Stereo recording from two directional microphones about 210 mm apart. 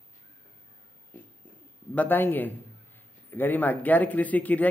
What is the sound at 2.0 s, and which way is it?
Speech, 10° left (ahead or behind).